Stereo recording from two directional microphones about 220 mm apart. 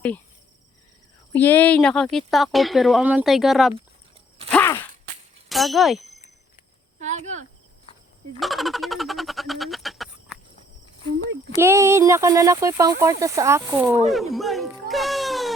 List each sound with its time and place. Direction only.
1.4 s speech: 10° left (ahead or behind)
4.5 s a sound: 10° left (ahead or behind)
5.5 s speech: centre (ahead or behind)
7.0 s speech: 30° right (ahead or behind)
8.4 s a sound: centre (ahead or behind)
11.5 s speech: 10° right (ahead or behind)
14.1 s speech: centre (ahead or behind)